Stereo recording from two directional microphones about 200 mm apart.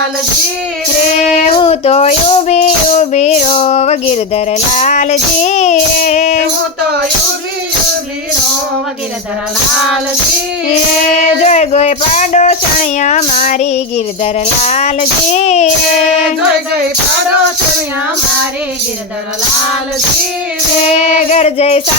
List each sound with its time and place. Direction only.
1.2 s female singing: 30° left (ahead or behind)
11.4 s speech: 35° left (ahead or behind)
21.0 s speech: 35° left (ahead or behind)